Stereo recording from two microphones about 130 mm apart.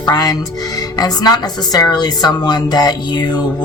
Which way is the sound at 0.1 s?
30° left (ahead or behind).